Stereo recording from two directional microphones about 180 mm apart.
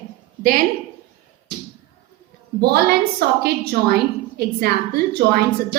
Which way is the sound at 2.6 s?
60° right (ahead or behind).